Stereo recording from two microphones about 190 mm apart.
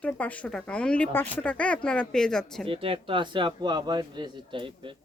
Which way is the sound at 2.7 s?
30° right (ahead or behind).